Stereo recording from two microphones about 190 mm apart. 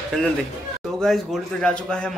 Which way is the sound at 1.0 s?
5° left (ahead or behind).